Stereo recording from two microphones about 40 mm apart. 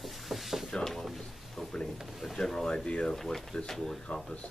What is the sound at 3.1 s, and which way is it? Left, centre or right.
Speech, centre.